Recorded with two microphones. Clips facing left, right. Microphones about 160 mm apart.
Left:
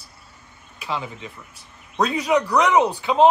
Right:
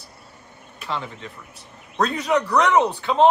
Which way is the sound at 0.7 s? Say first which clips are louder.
Left 1 dB; 5° left (ahead or behind).